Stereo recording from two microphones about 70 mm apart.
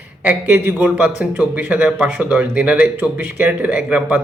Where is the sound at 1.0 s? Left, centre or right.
Right.